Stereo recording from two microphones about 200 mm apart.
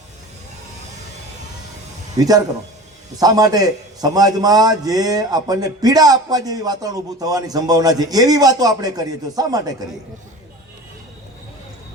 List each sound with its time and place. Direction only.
2.1 s a man's voice: 20° right (ahead or behind)